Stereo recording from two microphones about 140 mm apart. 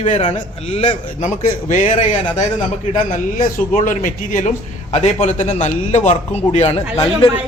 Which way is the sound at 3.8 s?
70° left (ahead or behind).